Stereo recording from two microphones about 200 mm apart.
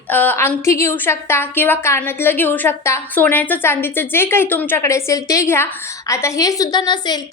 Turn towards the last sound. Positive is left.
turn(degrees=20)  # may be behind; listen again after turning